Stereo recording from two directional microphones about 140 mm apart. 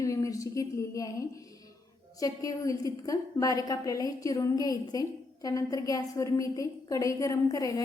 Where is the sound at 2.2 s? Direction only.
25° left (ahead or behind).